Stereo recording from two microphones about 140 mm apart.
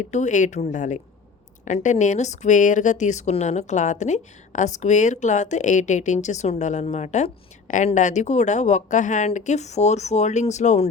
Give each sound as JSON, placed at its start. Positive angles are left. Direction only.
{"t": 0.0, "sound": "a woman's voice", "side_deg": 60}